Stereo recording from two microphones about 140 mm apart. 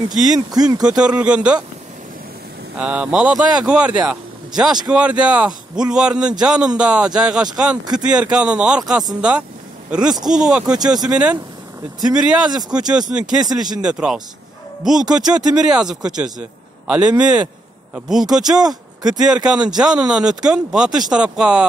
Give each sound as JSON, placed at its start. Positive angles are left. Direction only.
{"t": 0.1, "sound": "speech", "side_deg": -5}
{"t": 0.5, "sound": "speech", "side_deg": -25}
{"t": 0.8, "sound": "speech", "side_deg": -5}
{"t": 2.8, "sound": "a man's voice", "side_deg": -5}